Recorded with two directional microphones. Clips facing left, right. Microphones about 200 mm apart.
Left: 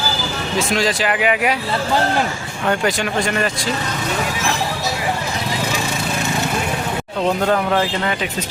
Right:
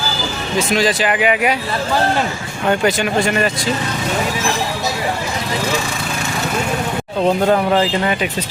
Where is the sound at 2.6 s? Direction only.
5° right (ahead or behind).